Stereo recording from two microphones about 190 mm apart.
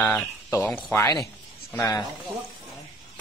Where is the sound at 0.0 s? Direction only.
10° left (ahead or behind).